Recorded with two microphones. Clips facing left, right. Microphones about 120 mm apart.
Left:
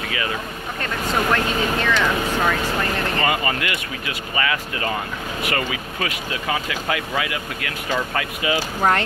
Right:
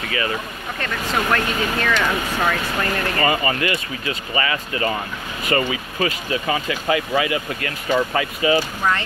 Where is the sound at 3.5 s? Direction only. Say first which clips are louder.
Right 3 dB; 90° left.